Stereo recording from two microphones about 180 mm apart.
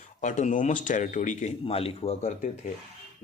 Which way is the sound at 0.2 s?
40° left (ahead or behind).